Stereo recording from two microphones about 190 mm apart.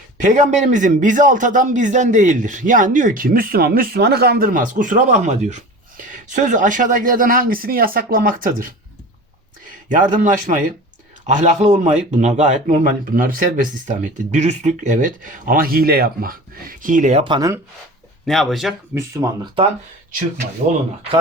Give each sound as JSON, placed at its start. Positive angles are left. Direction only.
{"t": 0.2, "sound": "a man's voice", "side_deg": -40}
{"t": 9.9, "sound": "a man's voice", "side_deg": -45}
{"t": 18.3, "sound": "speech", "side_deg": 0}
{"t": 18.9, "sound": "speech", "side_deg": -15}